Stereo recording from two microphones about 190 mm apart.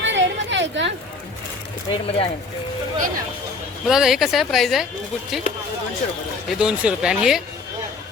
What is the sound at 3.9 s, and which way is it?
Speech, centre (ahead or behind).